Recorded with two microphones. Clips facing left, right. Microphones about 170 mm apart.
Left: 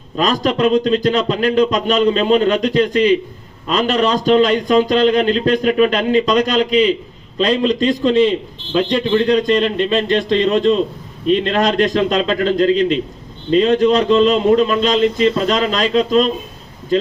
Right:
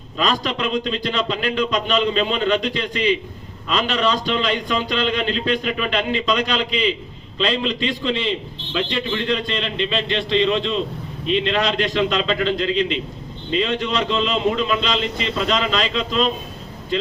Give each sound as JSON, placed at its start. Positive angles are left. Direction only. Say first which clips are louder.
{"t": 0.2, "sound": "a man's voice", "louder": "left 7 dB", "side_deg": 45}